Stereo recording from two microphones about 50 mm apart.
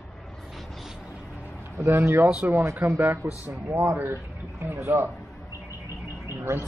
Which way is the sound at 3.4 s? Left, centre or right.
Right.